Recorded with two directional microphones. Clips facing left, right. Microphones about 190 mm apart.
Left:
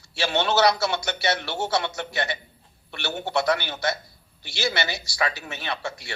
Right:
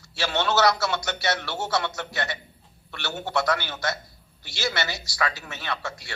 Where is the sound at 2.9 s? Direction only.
25° left (ahead or behind).